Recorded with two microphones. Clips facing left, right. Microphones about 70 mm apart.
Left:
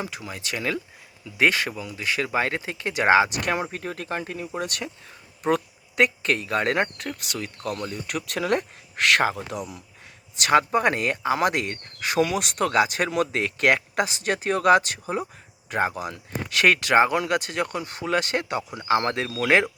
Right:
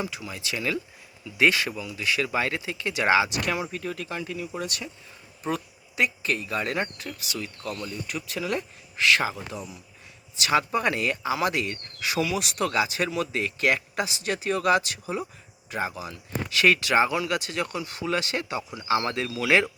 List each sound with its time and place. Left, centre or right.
0.0 s speech: left
10.4 s speech: left